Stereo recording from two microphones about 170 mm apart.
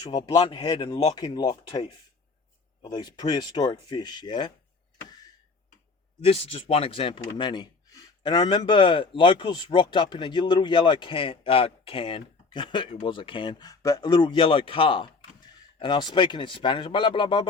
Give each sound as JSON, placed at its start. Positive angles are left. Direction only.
{"t": 0.1, "sound": "speech", "side_deg": 25}
{"t": 5.0, "sound": "a sound", "side_deg": 25}
{"t": 6.2, "sound": "speech", "side_deg": 35}